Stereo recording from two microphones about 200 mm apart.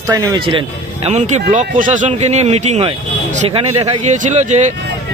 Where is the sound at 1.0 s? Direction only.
35° right (ahead or behind).